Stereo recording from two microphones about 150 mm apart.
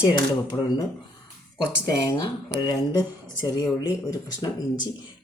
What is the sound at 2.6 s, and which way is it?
Speech, 25° left (ahead or behind).